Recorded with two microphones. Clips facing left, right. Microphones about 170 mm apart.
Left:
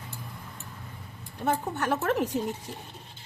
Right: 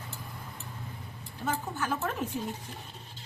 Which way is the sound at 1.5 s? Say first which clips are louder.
Left 5 dB; 65° left (ahead or behind).